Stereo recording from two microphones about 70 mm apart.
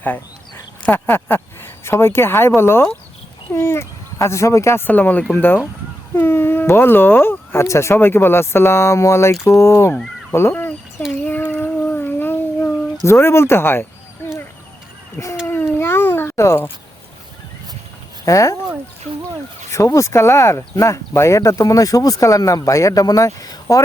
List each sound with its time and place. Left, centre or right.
0.8 s speech: left
4.9 s speech: left
11.3 s child singing: left
13.1 s speech: left
15.4 s cat: left
18.3 s speech: left
19.7 s speech: left